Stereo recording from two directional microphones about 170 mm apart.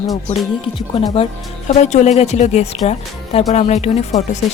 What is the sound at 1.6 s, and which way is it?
Speech, 40° left (ahead or behind).